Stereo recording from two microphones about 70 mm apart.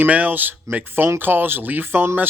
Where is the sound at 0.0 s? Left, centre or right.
Right.